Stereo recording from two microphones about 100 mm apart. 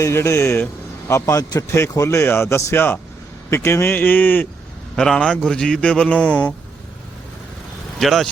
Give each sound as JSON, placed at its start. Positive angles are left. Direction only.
{"t": 0.0, "sound": "a man's voice", "side_deg": 25}
{"t": 2.0, "sound": "a man's voice", "side_deg": 25}
{"t": 4.9, "sound": "speech", "side_deg": 5}
{"t": 7.9, "sound": "speech", "side_deg": 0}